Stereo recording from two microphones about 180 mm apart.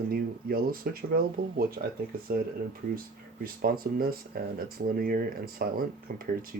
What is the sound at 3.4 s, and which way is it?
Speech, 55° right (ahead or behind).